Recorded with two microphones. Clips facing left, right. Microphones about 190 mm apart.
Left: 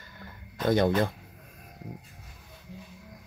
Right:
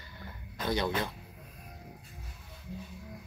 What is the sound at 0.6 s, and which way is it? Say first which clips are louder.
Speech: left 8 dB; 50° left (ahead or behind).